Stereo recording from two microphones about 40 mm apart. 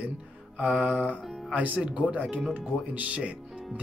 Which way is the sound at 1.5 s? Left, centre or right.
Right.